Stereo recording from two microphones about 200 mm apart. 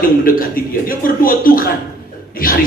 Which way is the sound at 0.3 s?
45° left (ahead or behind).